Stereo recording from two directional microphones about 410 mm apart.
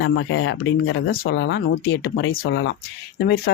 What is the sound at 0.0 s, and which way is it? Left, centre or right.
Speech, left.